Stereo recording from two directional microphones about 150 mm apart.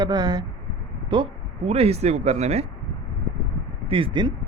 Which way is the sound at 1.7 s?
45° right (ahead or behind).